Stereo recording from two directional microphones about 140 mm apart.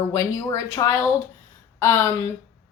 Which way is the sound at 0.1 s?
25° left (ahead or behind).